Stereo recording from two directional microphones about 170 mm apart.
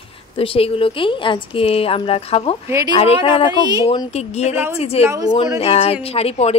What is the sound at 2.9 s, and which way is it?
A woman's voice, 30° left (ahead or behind).